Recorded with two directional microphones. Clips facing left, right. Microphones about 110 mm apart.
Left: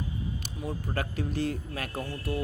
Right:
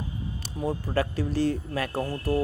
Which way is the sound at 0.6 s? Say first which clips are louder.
Right 7 dB; 35° right (ahead or behind).